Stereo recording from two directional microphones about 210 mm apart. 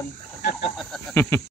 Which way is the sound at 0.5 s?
Centre (ahead or behind).